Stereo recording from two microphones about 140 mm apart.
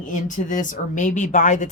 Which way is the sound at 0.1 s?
65° left (ahead or behind).